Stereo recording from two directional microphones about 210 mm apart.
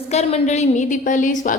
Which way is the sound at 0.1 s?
30° left (ahead or behind).